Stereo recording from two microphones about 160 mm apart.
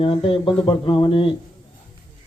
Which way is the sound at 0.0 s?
35° left (ahead or behind).